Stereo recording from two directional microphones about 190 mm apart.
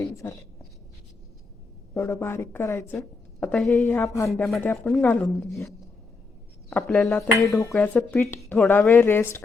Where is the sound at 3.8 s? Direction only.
10° left (ahead or behind).